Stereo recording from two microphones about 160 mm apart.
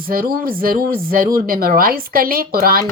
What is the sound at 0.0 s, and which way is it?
A woman's voice, 65° right (ahead or behind).